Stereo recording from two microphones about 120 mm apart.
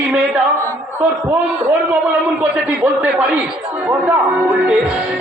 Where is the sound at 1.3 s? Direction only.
20° right (ahead or behind).